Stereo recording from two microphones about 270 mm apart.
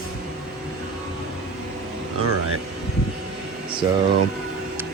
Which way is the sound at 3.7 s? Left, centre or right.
Centre.